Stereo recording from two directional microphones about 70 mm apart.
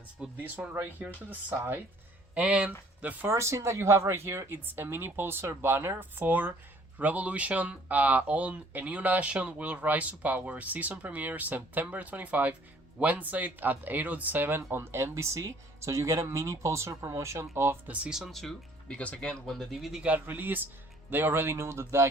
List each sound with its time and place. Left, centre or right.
0.3 s speech: right
2.3 s speech: centre
3.2 s speech: right
17.8 s speech: right
18.3 s speech: centre
18.9 s speech: centre
20.0 s speech: right